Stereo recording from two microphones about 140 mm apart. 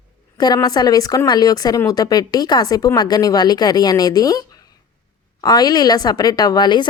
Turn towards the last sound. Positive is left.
turn(degrees=30)  # may be behind; listen again after turning